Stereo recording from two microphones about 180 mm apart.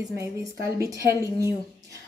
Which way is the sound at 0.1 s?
15° right (ahead or behind).